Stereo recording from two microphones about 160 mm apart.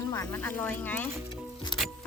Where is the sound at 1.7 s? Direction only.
30° left (ahead or behind).